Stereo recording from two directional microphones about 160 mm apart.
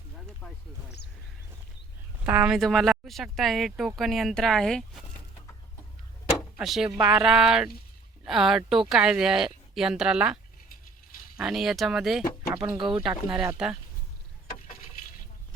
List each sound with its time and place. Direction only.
0.4 s speech: 10° left (ahead or behind)
2.2 s speech: 10° right (ahead or behind)
6.3 s speech: centre (ahead or behind)
11.3 s speech: 5° right (ahead or behind)
12.7 s speech: 30° right (ahead or behind)
13.0 s speech: 5° right (ahead or behind)